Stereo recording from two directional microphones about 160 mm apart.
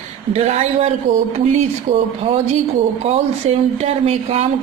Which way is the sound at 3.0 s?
40° right (ahead or behind).